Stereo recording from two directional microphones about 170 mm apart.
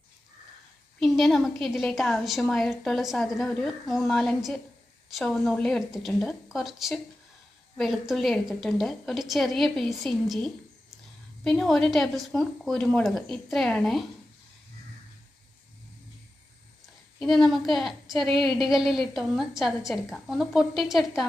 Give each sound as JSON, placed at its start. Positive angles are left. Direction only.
{"t": 0.9, "sound": "a woman's voice", "side_deg": 0}
{"t": 17.2, "sound": "a woman's voice", "side_deg": 0}